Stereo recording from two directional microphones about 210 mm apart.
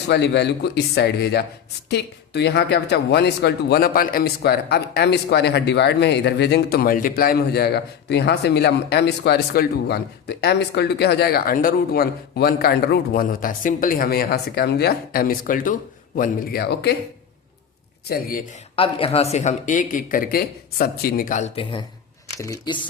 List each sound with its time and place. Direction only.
0.1 s speech: 55° left (ahead or behind)
18.0 s speech: 45° left (ahead or behind)
18.8 s speech: 25° left (ahead or behind)